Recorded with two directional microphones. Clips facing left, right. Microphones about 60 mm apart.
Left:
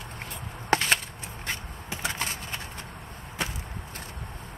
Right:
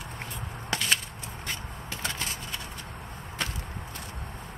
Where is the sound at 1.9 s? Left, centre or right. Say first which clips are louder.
Left 2 dB; centre.